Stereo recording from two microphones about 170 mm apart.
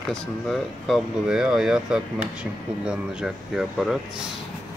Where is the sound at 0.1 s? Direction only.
Centre (ahead or behind).